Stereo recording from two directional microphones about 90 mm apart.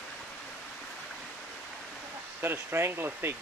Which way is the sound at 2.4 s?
25° right (ahead or behind).